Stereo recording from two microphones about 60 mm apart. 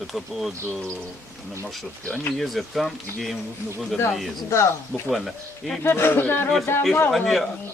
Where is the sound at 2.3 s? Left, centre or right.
Centre.